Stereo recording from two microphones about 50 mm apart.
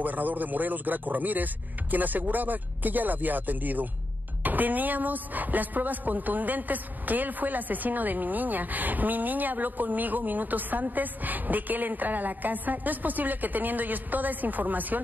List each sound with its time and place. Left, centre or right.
0.0 s a woman's voice: right